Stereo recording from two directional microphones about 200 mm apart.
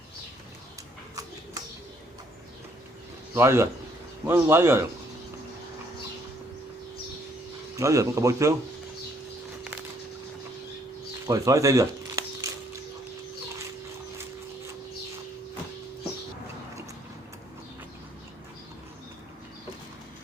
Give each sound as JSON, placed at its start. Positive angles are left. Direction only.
{"t": 3.3, "sound": "speech", "side_deg": -15}
{"t": 7.8, "sound": "speech", "side_deg": -15}
{"t": 11.3, "sound": "a sound", "side_deg": -15}